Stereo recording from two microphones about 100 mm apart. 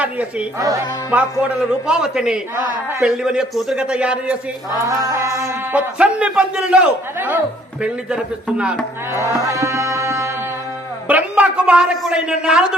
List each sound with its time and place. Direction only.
0.0 s a man's voice: 15° right (ahead or behind)
4.9 s mantra: 35° right (ahead or behind)
5.7 s a man's voice: 10° right (ahead or behind)
9.1 s music: 35° left (ahead or behind)
9.4 s music: 35° right (ahead or behind)
11.1 s a man's voice: 10° right (ahead or behind)